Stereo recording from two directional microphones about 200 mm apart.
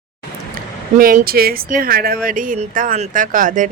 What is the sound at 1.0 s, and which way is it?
Speech, 45° right (ahead or behind).